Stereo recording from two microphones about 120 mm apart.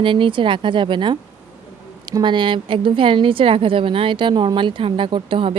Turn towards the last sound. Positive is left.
turn(degrees=-45)  # may be behind; listen again after turning